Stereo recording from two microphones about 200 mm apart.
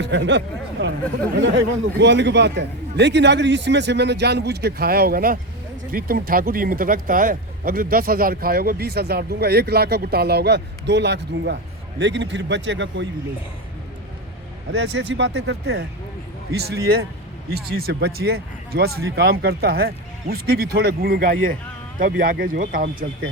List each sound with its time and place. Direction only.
0.0 s a man's voice: 65° right (ahead or behind)
14.7 s a man's voice: 60° right (ahead or behind)
17.5 s speech: 50° right (ahead or behind)